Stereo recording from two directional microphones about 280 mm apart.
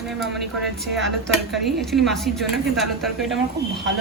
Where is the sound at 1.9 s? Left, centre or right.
Centre.